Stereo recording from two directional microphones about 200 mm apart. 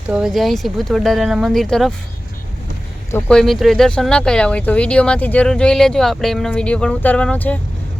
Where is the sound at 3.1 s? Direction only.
5° left (ahead or behind).